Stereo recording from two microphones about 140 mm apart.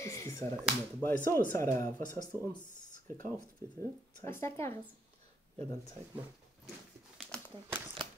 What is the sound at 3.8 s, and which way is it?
Speech, 20° left (ahead or behind).